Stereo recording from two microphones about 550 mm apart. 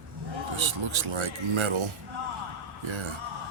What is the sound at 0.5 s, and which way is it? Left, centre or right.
Speech, right.